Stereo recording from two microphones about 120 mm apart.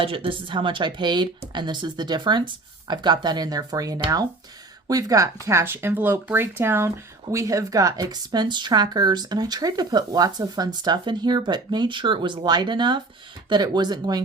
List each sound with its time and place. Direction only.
0.0 s a woman's voice: 50° right (ahead or behind)